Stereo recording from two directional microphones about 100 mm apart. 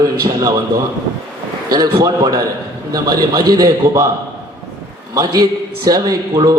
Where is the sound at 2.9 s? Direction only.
40° right (ahead or behind).